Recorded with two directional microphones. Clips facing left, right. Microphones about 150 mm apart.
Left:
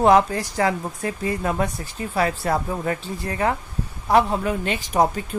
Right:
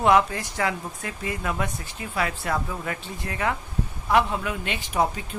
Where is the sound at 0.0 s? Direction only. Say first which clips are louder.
Left 4 dB; 35° left (ahead or behind).